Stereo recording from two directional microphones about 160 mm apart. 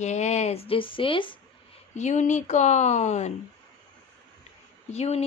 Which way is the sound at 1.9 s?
50° left (ahead or behind).